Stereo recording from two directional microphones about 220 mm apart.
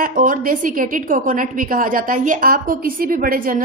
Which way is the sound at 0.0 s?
40° right (ahead or behind).